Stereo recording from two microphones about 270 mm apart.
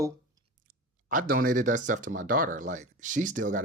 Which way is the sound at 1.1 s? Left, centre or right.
Right.